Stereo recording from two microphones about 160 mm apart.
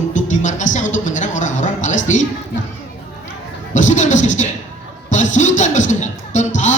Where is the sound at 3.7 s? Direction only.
50° left (ahead or behind).